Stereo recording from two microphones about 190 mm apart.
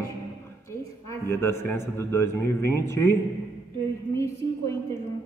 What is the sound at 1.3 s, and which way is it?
A man's voice, 15° left (ahead or behind).